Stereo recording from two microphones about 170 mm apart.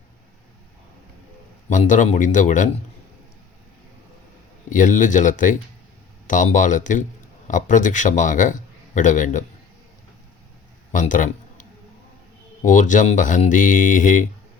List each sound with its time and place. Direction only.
1.7 s speech: 45° left (ahead or behind)
4.7 s a man's voice: 50° left (ahead or behind)
10.9 s a man's voice: 50° left (ahead or behind)
12.6 s speech: 50° left (ahead or behind)